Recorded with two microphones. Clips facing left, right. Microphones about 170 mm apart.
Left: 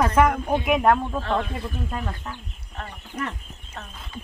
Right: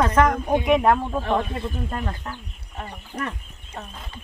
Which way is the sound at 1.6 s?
Centre (ahead or behind).